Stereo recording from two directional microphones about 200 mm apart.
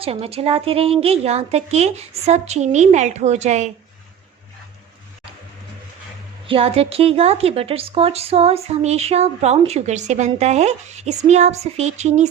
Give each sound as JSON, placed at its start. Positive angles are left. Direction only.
{"t": 0.0, "sound": "a woman's voice", "side_deg": -30}
{"t": 6.5, "sound": "a woman's voice", "side_deg": -30}